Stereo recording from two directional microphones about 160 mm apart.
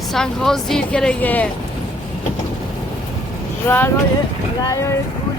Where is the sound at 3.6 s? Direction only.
15° left (ahead or behind).